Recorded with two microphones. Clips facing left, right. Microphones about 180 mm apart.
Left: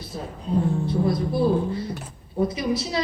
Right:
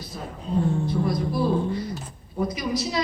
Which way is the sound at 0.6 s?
Centre (ahead or behind).